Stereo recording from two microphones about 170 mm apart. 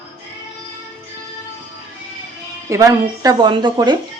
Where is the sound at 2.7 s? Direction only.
20° right (ahead or behind).